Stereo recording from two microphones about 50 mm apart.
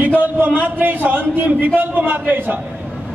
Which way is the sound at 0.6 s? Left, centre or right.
Right.